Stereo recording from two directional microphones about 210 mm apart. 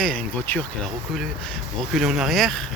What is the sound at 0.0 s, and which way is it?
Speech, 5° left (ahead or behind).